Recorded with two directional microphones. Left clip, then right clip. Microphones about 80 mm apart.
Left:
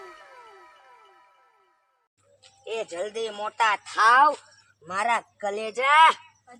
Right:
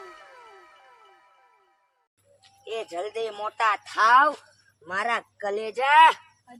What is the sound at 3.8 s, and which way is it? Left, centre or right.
Speech, right.